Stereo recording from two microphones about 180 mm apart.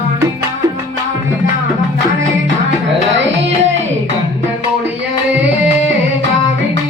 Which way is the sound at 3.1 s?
90° right.